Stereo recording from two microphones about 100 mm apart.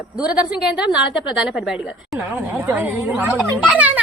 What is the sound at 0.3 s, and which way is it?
Speech, 10° right (ahead or behind).